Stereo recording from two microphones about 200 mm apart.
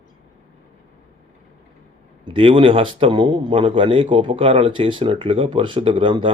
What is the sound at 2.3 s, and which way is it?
A man's voice, 25° right (ahead or behind).